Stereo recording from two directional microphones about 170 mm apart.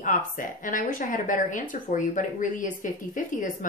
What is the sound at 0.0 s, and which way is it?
Speech, 50° left (ahead or behind).